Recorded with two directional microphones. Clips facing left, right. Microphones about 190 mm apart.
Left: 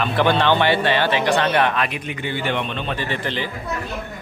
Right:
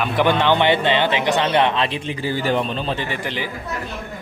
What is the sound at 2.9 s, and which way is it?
Speech, 15° right (ahead or behind).